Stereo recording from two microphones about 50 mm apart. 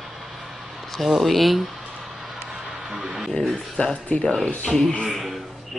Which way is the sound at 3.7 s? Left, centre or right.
Left.